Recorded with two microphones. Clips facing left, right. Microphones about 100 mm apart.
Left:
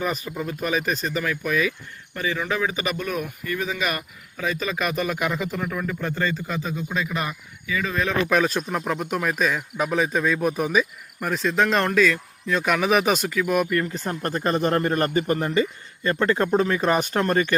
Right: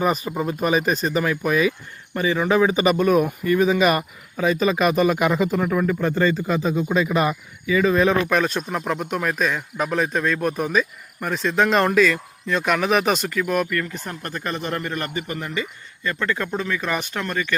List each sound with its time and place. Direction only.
0.0 s speech: 25° right (ahead or behind)
6.6 s speech: 25° right (ahead or behind)
8.3 s speech: centre (ahead or behind)
13.7 s a man's voice: 25° left (ahead or behind)